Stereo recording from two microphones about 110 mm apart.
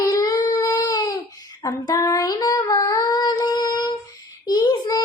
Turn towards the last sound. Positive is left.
turn(degrees=35)  # may be behind; listen again after turning